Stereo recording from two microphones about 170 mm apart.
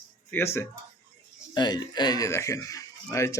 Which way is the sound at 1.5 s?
25° left (ahead or behind).